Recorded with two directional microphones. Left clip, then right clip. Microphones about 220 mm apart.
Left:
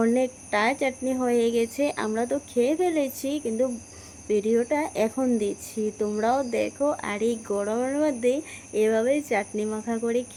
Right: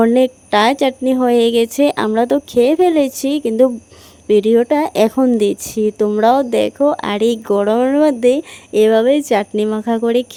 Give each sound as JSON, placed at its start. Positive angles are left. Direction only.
{"t": 0.0, "sound": "speech", "side_deg": -45}